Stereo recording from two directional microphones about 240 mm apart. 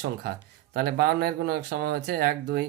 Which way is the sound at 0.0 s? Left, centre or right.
Right.